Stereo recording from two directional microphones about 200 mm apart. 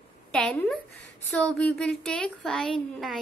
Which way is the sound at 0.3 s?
5° left (ahead or behind).